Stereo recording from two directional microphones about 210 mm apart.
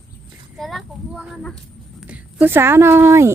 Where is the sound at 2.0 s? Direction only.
5° right (ahead or behind).